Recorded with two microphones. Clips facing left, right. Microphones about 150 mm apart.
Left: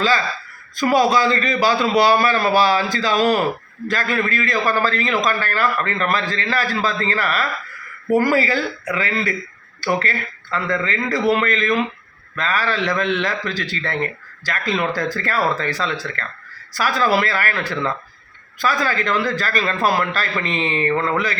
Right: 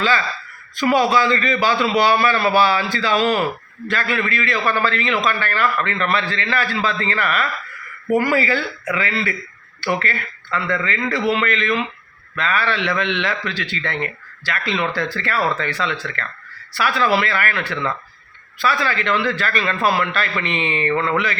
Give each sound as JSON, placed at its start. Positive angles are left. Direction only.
{"t": 0.8, "sound": "a man's voice", "side_deg": 40}